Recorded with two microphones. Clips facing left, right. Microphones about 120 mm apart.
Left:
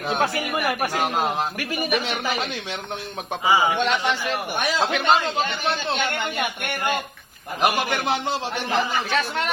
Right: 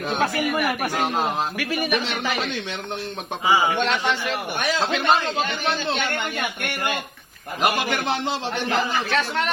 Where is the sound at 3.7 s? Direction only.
10° left (ahead or behind).